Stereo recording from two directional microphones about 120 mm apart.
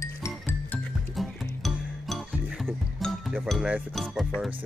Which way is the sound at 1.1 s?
Centre (ahead or behind).